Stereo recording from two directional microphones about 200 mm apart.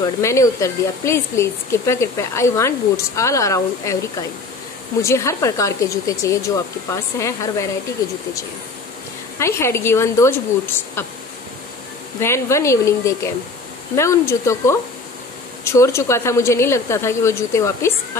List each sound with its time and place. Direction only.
0.0 s speech: 15° left (ahead or behind)
5.0 s speech: 15° left (ahead or behind)
9.4 s speech: 15° left (ahead or behind)
12.2 s speech: 15° left (ahead or behind)